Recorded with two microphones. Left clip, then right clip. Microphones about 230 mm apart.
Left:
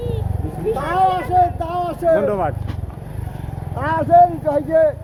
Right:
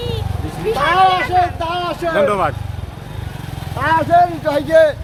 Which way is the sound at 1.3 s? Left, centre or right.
Left.